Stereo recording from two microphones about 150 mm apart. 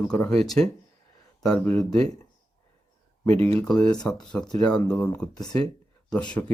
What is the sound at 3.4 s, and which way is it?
Speech, 10° left (ahead or behind).